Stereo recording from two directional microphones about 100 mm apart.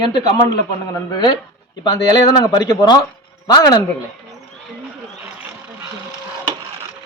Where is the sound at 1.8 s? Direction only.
45° left (ahead or behind).